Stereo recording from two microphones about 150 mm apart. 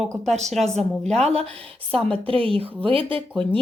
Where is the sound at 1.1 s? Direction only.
45° right (ahead or behind).